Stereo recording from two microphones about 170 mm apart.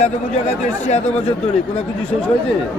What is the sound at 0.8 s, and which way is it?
Speech, 40° left (ahead or behind).